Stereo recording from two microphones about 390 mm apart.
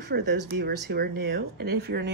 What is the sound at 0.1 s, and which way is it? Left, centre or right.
Speech, right.